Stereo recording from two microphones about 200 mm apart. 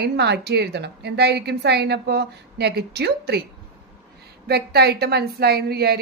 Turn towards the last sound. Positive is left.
turn(degrees=-50)  # may be behind; listen again after turning